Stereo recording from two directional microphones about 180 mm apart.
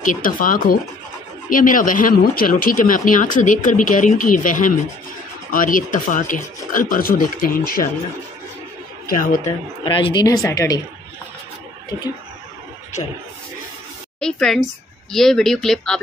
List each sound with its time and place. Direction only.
0.0 s speech: 50° left (ahead or behind)
9.0 s speech: 50° left (ahead or behind)
9.8 s speech: 25° left (ahead or behind)
14.2 s speech: 5° left (ahead or behind)